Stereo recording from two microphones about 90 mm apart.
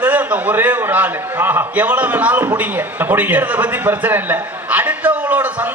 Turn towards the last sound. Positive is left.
turn(degrees=-20)  # may be behind; listen again after turning